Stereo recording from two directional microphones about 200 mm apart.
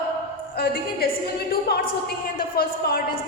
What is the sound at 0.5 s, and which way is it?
Speech, 50° left (ahead or behind).